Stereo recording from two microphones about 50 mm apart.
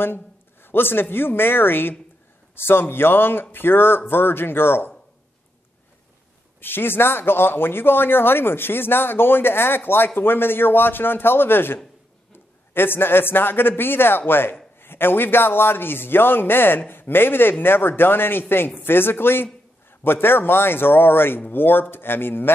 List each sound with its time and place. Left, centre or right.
0.0 s speech: left
6.6 s a man's voice: left